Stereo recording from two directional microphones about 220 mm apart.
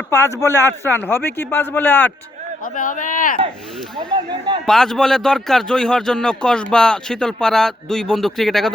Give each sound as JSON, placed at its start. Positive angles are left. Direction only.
{"t": 0.1, "sound": "a man's voice", "side_deg": 15}
{"t": 2.7, "sound": "speech", "side_deg": 35}
{"t": 3.9, "sound": "speech", "side_deg": -20}
{"t": 4.6, "sound": "speech", "side_deg": 0}